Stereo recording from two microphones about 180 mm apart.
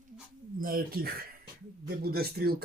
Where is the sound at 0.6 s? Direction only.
55° right (ahead or behind).